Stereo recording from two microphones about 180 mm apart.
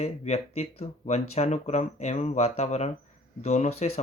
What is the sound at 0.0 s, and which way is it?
Speech, 35° left (ahead or behind).